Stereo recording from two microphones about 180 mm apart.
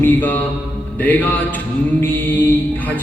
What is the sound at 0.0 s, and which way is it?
Mantra, 10° left (ahead or behind).